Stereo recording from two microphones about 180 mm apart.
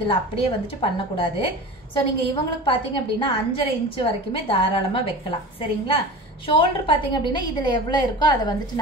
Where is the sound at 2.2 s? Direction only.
30° left (ahead or behind).